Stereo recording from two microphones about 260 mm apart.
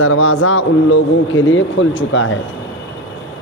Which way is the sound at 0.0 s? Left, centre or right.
Left.